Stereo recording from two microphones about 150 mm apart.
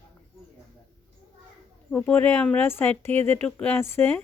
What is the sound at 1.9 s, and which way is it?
Speech, 10° left (ahead or behind).